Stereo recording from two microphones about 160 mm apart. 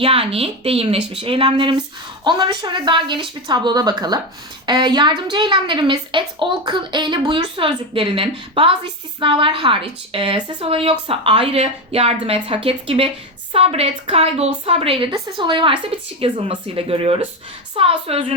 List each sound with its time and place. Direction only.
0.0 s a woman's voice: 35° right (ahead or behind)